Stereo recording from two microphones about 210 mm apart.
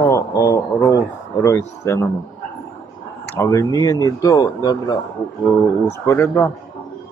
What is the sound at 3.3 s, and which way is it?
A man's voice, 15° left (ahead or behind).